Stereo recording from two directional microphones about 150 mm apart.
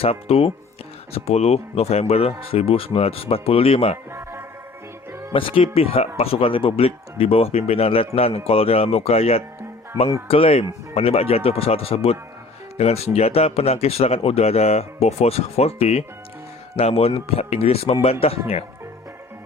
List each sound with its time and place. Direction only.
0.0 s speech: 40° left (ahead or behind)
4.1 s music: 15° right (ahead or behind)
5.3 s speech: 35° left (ahead or behind)